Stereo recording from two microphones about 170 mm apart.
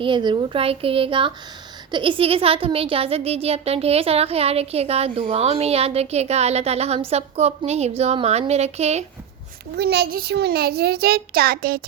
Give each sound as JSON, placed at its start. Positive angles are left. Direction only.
{"t": 0.0, "sound": "speech", "side_deg": -30}
{"t": 9.7, "sound": "a child's voice", "side_deg": -70}